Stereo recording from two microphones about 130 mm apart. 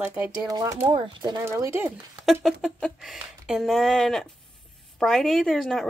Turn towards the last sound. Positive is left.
turn(degrees=0)  # may be behind; listen again after turning